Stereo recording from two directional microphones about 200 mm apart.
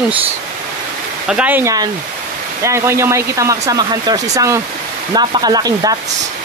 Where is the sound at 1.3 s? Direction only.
10° right (ahead or behind).